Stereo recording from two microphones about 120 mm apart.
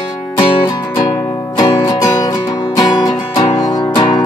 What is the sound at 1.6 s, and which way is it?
Music, 35° left (ahead or behind).